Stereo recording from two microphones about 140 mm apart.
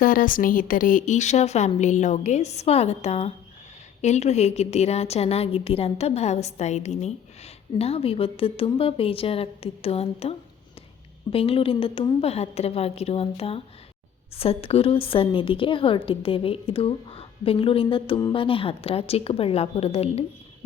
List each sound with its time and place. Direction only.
0.0 s a woman's voice: 85° left; by 20.2 s 45° left (ahead or behind)